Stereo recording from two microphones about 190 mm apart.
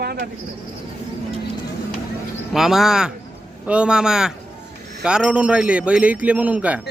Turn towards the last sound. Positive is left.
turn(degrees=-5)  # may be behind; listen again after turning